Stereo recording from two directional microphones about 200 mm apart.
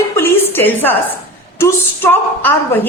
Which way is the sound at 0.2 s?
10° left (ahead or behind).